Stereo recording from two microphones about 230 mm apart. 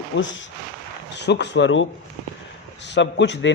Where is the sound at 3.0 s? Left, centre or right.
Left.